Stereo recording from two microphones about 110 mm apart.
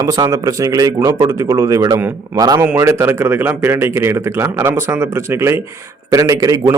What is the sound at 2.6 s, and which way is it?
A man's voice, 20° right (ahead or behind).